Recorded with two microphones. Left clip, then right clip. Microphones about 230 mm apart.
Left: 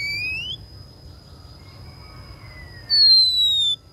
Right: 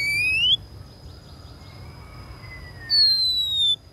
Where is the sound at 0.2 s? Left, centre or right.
Centre.